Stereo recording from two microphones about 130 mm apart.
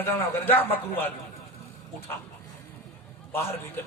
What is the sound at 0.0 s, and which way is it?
A man's voice, 15° left (ahead or behind).